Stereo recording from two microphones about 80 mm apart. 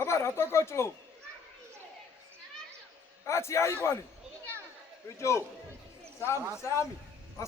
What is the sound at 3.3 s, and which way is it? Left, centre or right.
Speech, left.